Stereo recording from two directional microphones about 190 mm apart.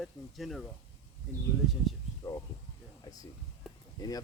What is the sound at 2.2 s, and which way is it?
Speech, 15° left (ahead or behind).